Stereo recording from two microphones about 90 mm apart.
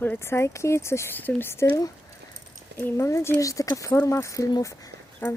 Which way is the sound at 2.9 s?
30° left (ahead or behind).